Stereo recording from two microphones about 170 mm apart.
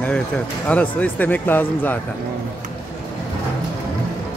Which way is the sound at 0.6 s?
10° left (ahead or behind).